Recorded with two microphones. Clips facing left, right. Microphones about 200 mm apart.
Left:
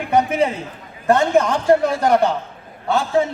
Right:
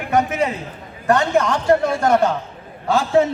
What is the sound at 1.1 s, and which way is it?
A man's voice, 20° left (ahead or behind).